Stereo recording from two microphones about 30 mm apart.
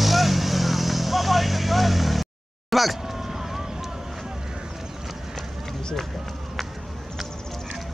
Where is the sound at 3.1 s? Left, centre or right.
Centre.